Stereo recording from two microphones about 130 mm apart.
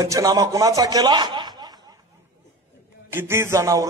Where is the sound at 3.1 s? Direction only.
20° right (ahead or behind).